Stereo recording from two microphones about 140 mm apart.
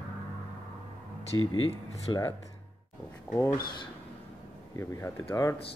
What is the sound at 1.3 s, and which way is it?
Speech, 30° left (ahead or behind).